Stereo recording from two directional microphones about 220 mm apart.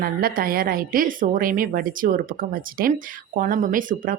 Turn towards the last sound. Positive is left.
turn(degrees=-40)  # may be behind; listen again after turning